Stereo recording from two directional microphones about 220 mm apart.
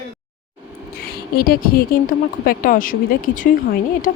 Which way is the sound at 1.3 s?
40° left (ahead or behind).